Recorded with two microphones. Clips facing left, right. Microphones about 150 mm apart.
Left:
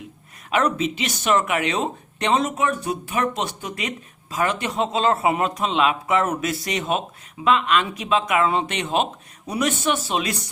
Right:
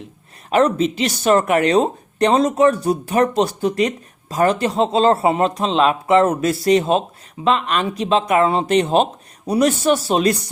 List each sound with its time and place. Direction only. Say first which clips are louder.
0.5 s speech: right 6 dB; 35° right (ahead or behind)